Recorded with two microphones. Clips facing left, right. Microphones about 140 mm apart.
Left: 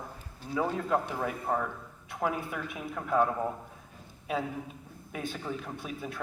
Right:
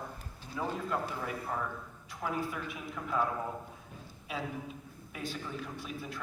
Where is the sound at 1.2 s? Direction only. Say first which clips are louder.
Left 5 dB; 55° left (ahead or behind).